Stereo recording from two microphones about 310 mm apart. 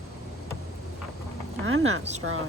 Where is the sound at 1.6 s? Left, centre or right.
Right.